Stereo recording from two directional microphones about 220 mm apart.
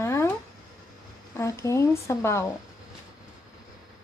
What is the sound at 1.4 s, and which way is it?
Speech, 15° left (ahead or behind).